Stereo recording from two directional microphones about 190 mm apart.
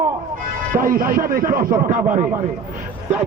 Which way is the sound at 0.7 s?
50° right (ahead or behind).